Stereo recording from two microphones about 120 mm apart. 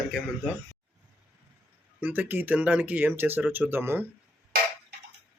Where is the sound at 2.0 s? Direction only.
15° right (ahead or behind).